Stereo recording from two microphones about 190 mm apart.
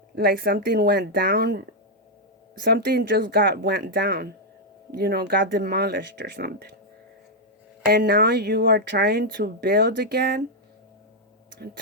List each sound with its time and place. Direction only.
0.2 s speech: 55° right (ahead or behind)
7.9 s speech: 55° right (ahead or behind)